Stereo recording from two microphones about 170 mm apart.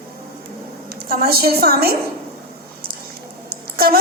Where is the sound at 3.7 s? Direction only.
60° right (ahead or behind).